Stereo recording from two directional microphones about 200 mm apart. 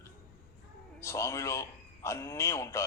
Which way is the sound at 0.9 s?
15° left (ahead or behind).